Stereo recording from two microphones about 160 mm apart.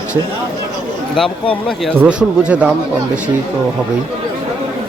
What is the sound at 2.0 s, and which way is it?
Speech, 5° right (ahead or behind).